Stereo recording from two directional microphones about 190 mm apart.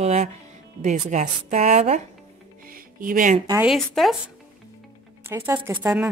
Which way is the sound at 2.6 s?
50° right (ahead or behind).